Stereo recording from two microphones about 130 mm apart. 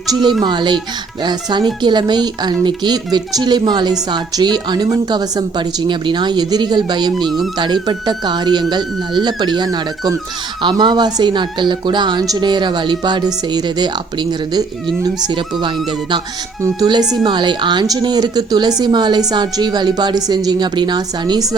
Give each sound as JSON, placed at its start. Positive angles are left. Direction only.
{"t": 0.1, "sound": "speech", "side_deg": -35}
{"t": 17.2, "sound": "speech", "side_deg": -35}